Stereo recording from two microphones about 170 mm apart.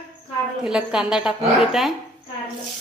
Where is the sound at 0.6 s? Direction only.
5° right (ahead or behind).